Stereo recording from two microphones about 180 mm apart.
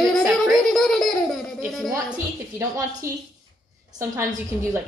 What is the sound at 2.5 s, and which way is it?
Speech, 15° right (ahead or behind).